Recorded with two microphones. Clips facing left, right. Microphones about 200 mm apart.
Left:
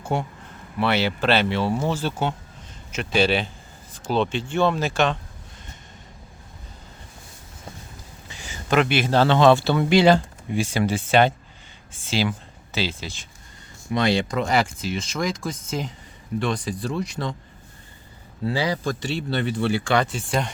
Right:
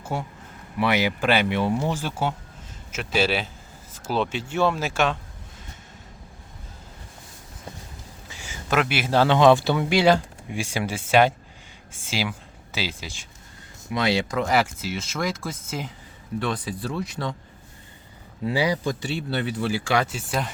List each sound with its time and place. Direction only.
0.0 s a man's voice: centre (ahead or behind)
0.8 s a man's voice: 15° right (ahead or behind)
8.3 s a man's voice: 10° right (ahead or behind)
18.4 s a man's voice: 15° right (ahead or behind)